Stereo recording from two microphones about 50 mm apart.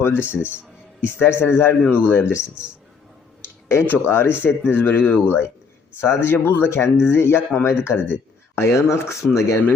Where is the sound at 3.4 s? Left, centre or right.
Left.